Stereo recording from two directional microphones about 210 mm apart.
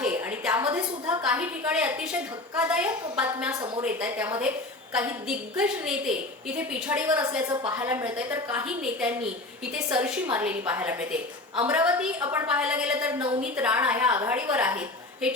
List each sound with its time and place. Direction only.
0.0 s a sound: 5° right (ahead or behind)
1.2 s a woman's voice: 5° right (ahead or behind)
13.1 s a woman's voice: 20° right (ahead or behind)
13.4 s a woman's voice: 5° right (ahead or behind)